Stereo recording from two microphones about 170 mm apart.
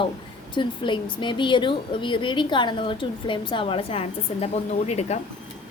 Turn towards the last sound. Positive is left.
turn(degrees=40)  # may be behind; listen again after turning